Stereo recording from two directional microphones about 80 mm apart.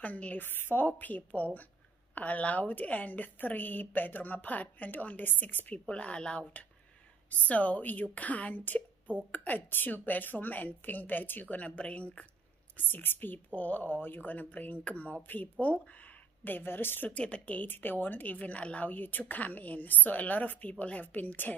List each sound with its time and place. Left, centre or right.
0.0 s a woman's voice: centre